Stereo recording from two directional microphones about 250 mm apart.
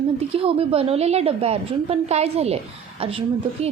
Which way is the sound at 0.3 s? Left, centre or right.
Right.